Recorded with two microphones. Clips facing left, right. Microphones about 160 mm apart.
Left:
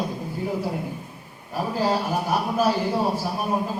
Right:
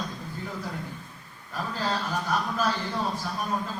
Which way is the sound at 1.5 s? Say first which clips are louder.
Left 7 dB; 10° left (ahead or behind).